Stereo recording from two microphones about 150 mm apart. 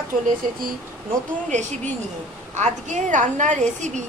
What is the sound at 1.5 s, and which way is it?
A woman's voice, 55° right (ahead or behind).